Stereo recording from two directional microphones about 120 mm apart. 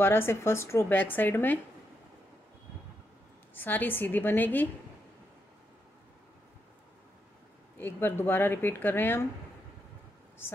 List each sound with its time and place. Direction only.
0.0 s speech: 20° left (ahead or behind)
3.5 s speech: 15° left (ahead or behind)
7.7 s speech: 15° left (ahead or behind)